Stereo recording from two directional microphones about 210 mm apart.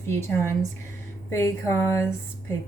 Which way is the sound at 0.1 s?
10° left (ahead or behind).